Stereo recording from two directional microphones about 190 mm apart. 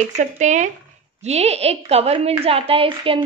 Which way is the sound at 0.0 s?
40° right (ahead or behind).